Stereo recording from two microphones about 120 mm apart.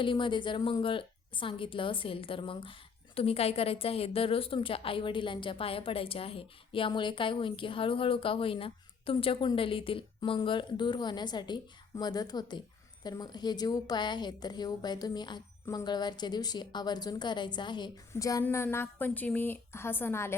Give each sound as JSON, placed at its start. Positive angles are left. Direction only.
{"t": 0.0, "sound": "a woman's voice", "side_deg": 40}
{"t": 18.1, "sound": "a woman's voice", "side_deg": 30}